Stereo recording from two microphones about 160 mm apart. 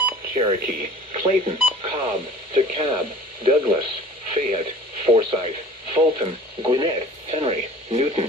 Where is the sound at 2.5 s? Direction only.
30° right (ahead or behind).